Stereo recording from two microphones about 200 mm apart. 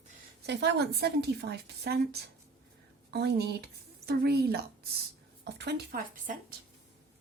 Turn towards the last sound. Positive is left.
turn(degrees=-45)  # may be behind; listen again after turning